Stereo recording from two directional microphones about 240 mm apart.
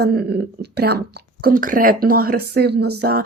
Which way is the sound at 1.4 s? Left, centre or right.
Right.